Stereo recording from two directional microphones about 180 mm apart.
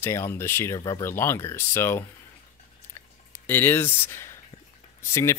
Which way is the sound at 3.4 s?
10° left (ahead or behind).